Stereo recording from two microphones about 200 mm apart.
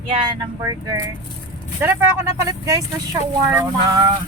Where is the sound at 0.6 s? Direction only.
15° right (ahead or behind).